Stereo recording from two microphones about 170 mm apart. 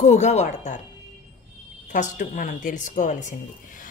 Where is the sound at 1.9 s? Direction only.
50° left (ahead or behind).